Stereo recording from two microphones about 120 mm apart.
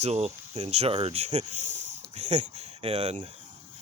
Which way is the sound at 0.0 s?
60° right (ahead or behind).